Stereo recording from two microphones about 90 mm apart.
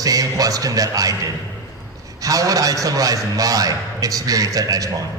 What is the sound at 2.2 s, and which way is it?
A man's voice, 40° right (ahead or behind).